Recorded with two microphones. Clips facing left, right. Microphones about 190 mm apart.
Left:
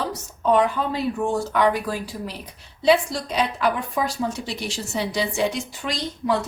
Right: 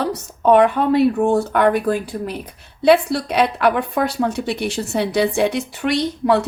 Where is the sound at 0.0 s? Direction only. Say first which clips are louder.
Right 6 dB; 65° right (ahead or behind).